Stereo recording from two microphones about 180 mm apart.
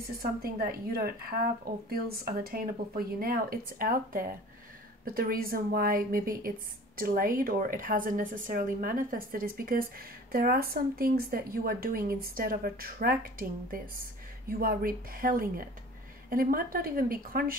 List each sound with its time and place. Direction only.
0.2 s a woman's voice: 55° right (ahead or behind)